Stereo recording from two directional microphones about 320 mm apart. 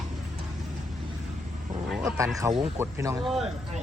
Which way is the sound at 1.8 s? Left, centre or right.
Centre.